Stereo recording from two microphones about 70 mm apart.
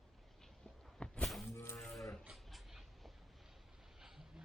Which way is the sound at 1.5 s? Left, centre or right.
Left.